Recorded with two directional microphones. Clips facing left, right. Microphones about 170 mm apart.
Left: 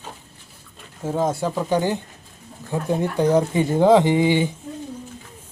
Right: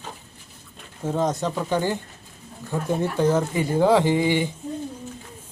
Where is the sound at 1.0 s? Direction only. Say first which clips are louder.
Left 1 dB; 5° left (ahead or behind).